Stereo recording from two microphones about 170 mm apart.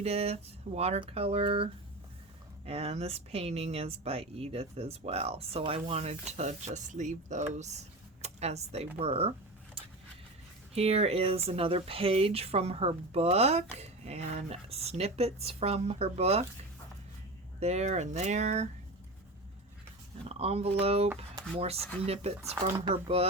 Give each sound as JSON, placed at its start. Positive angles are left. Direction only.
{"t": 0.0, "sound": "speech", "side_deg": -40}
{"t": 10.8, "sound": "speech", "side_deg": -35}
{"t": 17.6, "sound": "speech", "side_deg": -40}
{"t": 20.2, "sound": "speech", "side_deg": -35}